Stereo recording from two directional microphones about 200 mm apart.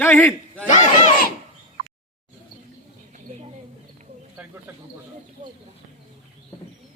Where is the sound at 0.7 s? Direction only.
35° left (ahead or behind).